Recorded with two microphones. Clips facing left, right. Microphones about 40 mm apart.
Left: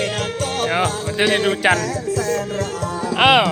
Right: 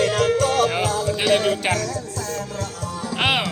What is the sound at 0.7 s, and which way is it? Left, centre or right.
Music, left.